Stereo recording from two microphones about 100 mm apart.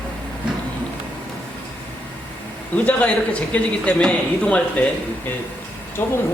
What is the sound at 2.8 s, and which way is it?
A man's voice, 15° left (ahead or behind).